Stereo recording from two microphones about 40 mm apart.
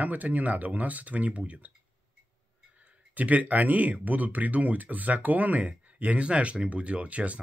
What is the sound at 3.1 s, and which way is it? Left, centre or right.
Speech, right.